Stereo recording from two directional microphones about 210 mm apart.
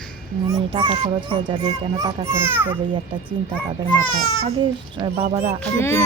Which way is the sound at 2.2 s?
10° right (ahead or behind).